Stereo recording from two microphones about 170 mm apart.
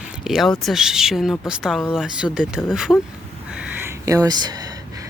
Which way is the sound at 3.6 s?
15° right (ahead or behind).